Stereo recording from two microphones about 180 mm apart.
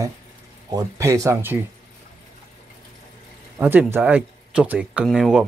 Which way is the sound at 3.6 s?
10° right (ahead or behind).